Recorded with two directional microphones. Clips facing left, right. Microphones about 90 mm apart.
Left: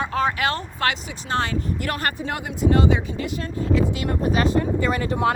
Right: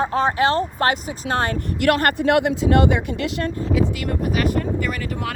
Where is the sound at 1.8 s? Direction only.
65° right (ahead or behind); by 3.5 s 80° right.